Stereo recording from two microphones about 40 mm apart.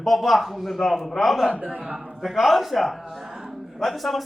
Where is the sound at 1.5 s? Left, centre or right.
Right.